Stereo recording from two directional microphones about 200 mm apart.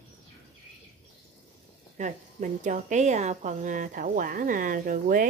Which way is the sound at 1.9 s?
40° right (ahead or behind).